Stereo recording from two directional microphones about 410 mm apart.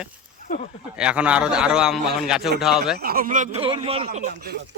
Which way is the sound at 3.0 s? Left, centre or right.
Right.